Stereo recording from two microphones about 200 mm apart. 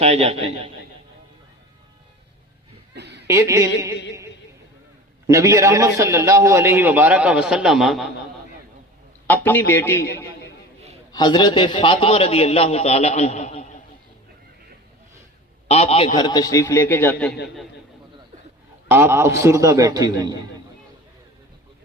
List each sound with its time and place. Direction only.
0.0 s a man's voice: 30° right (ahead or behind)
2.9 s a sound: 60° right (ahead or behind)
3.2 s a man's voice: 15° right (ahead or behind)
5.2 s a man's voice: 15° right (ahead or behind)
9.2 s a man's voice: 10° left (ahead or behind)
11.1 s a man's voice: 20° left (ahead or behind)
15.6 s a man's voice: 30° left (ahead or behind); by 17.3 s 5° left (ahead or behind)
18.9 s a man's voice: 10° right (ahead or behind)